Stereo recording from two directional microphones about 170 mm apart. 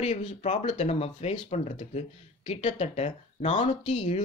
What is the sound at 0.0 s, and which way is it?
Speech, 45° left (ahead or behind).